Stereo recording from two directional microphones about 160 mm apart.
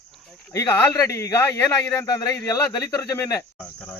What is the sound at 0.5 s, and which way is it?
Speech, 15° left (ahead or behind).